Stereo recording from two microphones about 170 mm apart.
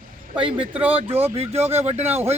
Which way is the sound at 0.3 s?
30° right (ahead or behind).